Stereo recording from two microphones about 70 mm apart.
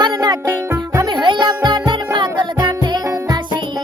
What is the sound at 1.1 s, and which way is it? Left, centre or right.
Music, right.